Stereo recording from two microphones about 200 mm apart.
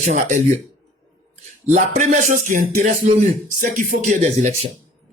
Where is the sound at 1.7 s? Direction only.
40° right (ahead or behind).